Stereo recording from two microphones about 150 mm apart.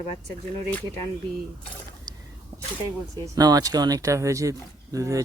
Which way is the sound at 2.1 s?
25° right (ahead or behind).